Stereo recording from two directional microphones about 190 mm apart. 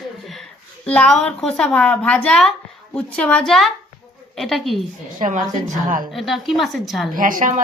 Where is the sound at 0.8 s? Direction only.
5° left (ahead or behind).